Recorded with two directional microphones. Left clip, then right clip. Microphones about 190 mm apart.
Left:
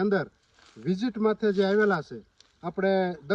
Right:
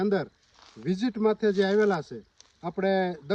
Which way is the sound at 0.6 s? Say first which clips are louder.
Right 1 dB; 30° right (ahead or behind).